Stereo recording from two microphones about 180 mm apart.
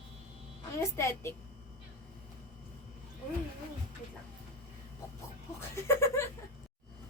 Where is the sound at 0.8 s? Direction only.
15° left (ahead or behind).